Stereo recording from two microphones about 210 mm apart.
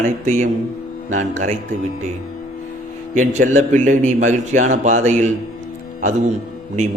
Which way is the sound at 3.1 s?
40° right (ahead or behind).